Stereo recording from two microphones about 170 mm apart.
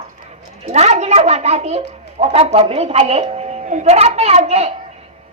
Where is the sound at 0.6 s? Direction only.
40° right (ahead or behind).